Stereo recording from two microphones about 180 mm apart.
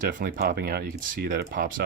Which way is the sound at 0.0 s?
50° right (ahead or behind).